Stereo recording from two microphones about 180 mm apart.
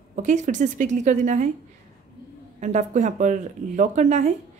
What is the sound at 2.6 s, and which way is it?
A woman's voice, 40° right (ahead or behind).